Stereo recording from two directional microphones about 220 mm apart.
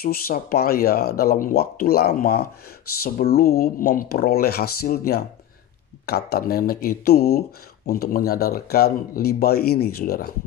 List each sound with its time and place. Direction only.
0.0 s speech: 45° left (ahead or behind)